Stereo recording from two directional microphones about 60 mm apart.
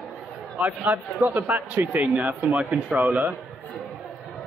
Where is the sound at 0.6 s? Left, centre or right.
Right.